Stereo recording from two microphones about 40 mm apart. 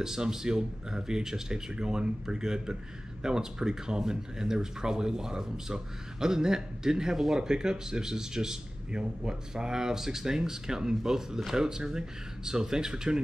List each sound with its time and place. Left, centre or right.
0.0 s speech: centre